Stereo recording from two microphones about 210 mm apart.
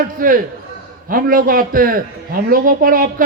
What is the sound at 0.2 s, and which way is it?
A man's voice, 40° right (ahead or behind).